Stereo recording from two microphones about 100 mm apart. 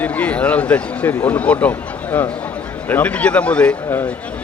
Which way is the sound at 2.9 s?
15° left (ahead or behind).